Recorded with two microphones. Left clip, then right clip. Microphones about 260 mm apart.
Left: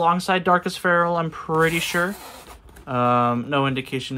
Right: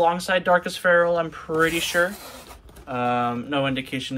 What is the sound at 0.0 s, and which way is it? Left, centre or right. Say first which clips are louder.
Speech: left 1 dB; centre.